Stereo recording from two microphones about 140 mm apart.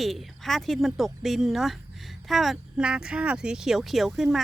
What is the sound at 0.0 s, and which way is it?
Speech, centre (ahead or behind).